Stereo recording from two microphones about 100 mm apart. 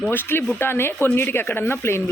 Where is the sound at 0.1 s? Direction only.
20° left (ahead or behind).